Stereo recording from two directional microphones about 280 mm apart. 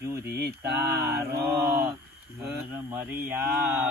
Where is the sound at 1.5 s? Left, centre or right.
Centre.